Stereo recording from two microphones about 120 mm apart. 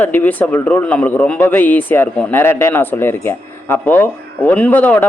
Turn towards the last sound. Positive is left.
turn(degrees=15)  # may be behind; listen again after turning